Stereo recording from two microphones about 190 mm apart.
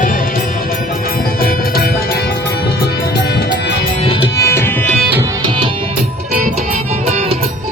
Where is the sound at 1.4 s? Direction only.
55° left (ahead or behind).